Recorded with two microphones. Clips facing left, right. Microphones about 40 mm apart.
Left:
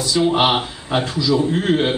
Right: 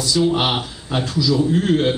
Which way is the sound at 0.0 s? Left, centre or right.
Left.